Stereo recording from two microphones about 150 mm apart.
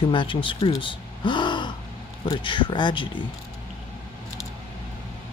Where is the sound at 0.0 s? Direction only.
35° left (ahead or behind).